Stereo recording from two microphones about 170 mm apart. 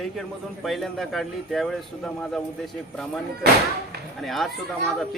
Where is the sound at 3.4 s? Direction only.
75° right (ahead or behind).